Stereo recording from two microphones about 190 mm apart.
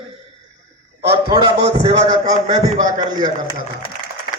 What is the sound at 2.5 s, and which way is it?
Speech, 20° right (ahead or behind).